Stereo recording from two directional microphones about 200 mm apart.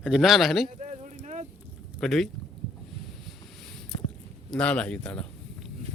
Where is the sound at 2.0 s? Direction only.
Centre (ahead or behind).